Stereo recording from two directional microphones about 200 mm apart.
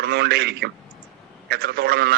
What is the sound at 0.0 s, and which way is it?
A man's voice, 55° right (ahead or behind).